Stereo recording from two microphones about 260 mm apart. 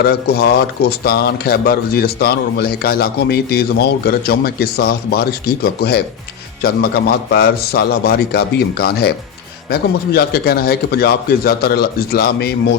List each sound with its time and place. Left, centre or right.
0.0 s speech: left
6.6 s speech: left